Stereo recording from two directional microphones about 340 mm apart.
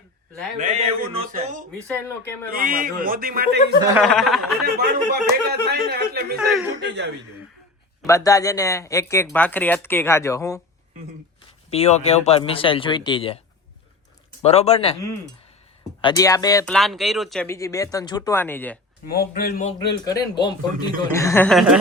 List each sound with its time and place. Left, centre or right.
0.6 s speech: centre
3.8 s speech: centre
4.0 s speech: centre
4.6 s speech: right
8.0 s speech: centre
11.7 s speech: centre
14.4 s speech: centre
19.0 s speech: left
20.1 s speech: centre